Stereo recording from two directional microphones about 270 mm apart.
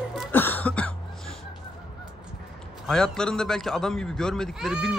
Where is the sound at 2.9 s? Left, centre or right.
Centre.